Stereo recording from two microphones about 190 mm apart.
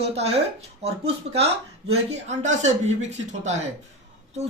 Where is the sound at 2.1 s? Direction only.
35° right (ahead or behind).